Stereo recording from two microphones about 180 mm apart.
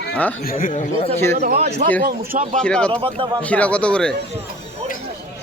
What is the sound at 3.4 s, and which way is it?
Speech, 5° left (ahead or behind).